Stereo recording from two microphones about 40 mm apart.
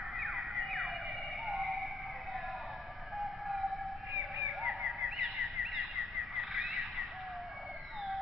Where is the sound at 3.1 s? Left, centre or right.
Centre.